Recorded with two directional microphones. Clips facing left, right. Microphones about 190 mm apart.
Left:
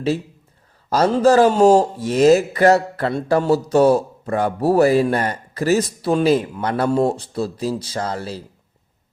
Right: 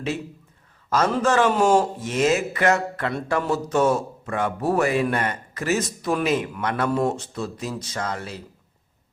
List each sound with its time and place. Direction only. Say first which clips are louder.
0.9 s speech: left 6 dB; 35° left (ahead or behind)